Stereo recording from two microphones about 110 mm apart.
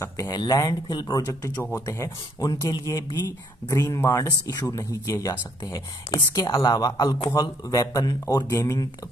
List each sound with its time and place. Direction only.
0.0 s speech: 25° left (ahead or behind)